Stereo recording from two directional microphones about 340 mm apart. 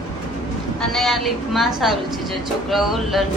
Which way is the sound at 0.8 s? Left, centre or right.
Centre.